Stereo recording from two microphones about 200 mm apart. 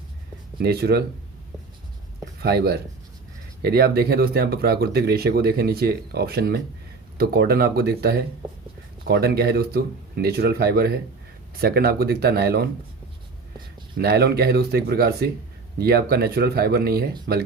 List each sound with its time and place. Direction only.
0.6 s speech: 55° right (ahead or behind)
2.4 s speech: 50° right (ahead or behind)
13.9 s speech: 50° right (ahead or behind)